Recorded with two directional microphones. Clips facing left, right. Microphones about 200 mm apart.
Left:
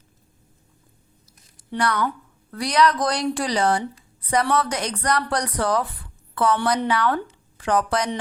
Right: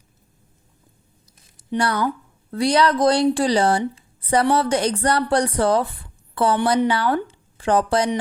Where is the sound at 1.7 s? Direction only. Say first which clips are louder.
Right 2 dB; 30° right (ahead or behind).